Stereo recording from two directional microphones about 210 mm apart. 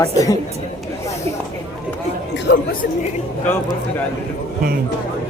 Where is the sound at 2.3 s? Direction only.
60° left (ahead or behind).